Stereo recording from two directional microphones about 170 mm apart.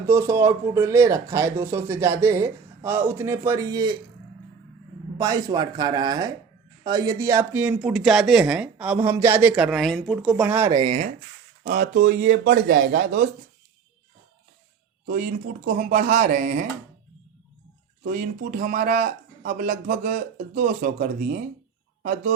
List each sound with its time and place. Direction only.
0.1 s speech: 15° right (ahead or behind)
5.1 s speech: 20° right (ahead or behind)
10.7 s speech: 25° right (ahead or behind)
11.6 s speech: 65° right (ahead or behind)
15.0 s speech: 60° right (ahead or behind)
18.0 s speech: 60° right (ahead or behind)